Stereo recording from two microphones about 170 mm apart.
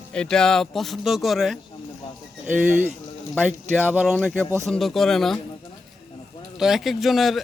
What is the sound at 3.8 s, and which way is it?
Speech, 10° right (ahead or behind).